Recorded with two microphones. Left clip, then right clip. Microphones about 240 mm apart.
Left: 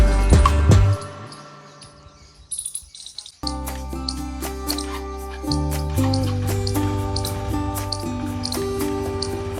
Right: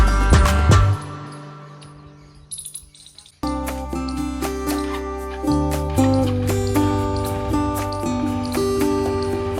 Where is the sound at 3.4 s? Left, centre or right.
Centre.